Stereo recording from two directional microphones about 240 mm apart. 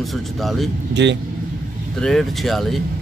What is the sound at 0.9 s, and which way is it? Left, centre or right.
Speech, right.